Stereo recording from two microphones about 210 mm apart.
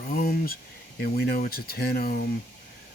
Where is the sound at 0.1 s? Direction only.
45° left (ahead or behind).